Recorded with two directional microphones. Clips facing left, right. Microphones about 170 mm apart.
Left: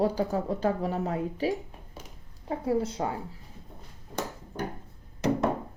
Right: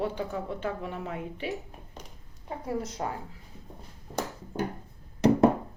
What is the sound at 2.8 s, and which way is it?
Speech, 30° left (ahead or behind).